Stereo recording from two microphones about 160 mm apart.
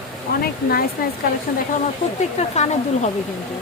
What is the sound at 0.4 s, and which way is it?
Speech, 70° left (ahead or behind).